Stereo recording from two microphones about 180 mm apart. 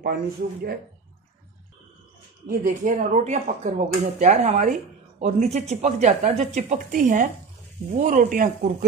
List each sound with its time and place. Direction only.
0.0 s speech: 55° right (ahead or behind)
2.4 s speech: 45° right (ahead or behind)